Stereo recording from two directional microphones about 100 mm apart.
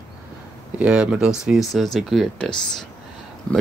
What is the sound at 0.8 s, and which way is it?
Speech, 10° right (ahead or behind).